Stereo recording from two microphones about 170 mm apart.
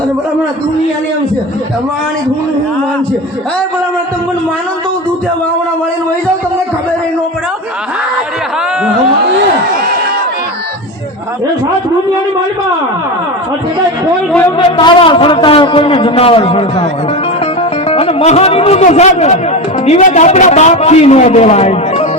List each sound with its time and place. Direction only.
14.8 s a man's voice: 30° left (ahead or behind)
17.8 s a man's voice: 35° left (ahead or behind)